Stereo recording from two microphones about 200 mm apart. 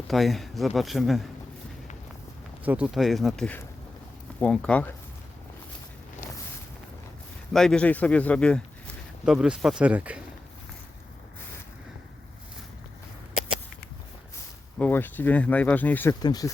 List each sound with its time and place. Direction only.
0.1 s speech: centre (ahead or behind)
2.6 s speech: 5° right (ahead or behind)
7.5 s speech: 5° left (ahead or behind)
14.8 s speech: 10° left (ahead or behind)
16.2 s speech: 20° left (ahead or behind)